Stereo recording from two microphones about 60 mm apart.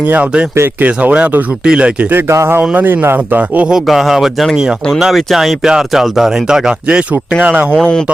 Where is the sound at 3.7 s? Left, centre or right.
Centre; by 7.6 s right.